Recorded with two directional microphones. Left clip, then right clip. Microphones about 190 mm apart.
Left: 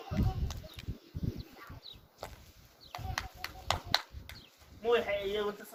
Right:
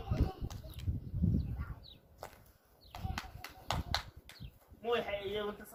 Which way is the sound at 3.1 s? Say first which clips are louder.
Left 6 dB; 10° left (ahead or behind).